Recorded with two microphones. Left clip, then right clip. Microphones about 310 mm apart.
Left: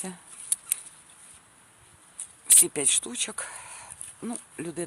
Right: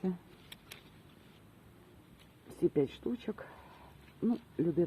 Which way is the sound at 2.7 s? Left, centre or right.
Left.